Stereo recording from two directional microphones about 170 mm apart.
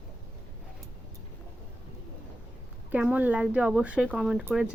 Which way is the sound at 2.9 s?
10° right (ahead or behind).